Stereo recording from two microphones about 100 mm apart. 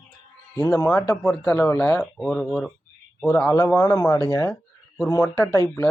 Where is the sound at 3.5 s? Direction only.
30° left (ahead or behind).